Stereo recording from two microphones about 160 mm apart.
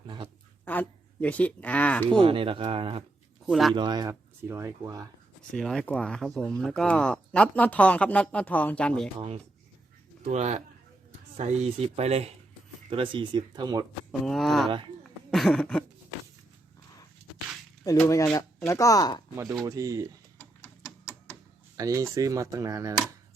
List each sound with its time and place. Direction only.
0.6 s speech: 10° left (ahead or behind)
2.1 s speech: 35° right (ahead or behind)
3.4 s speech: centre (ahead or behind)
3.8 s speech: 30° right (ahead or behind)
4.1 s speech: 15° right (ahead or behind)
5.5 s speech: 5° left (ahead or behind)
9.1 s speech: 35° right (ahead or behind)
14.1 s speech: centre (ahead or behind)
15.3 s a sound: centre (ahead or behind)
17.9 s speech: 15° left (ahead or behind)
19.6 s speech: 20° right (ahead or behind)
20.6 s mechanisms: 15° left (ahead or behind)
21.8 s speech: 20° right (ahead or behind)